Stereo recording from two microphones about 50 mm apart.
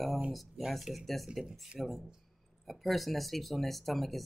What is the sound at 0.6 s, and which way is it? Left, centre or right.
Speech, centre.